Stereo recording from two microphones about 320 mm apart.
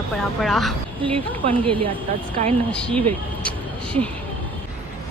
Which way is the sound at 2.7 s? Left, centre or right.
Centre.